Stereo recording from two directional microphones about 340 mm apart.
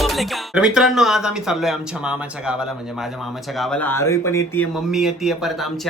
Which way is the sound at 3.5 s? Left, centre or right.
Centre.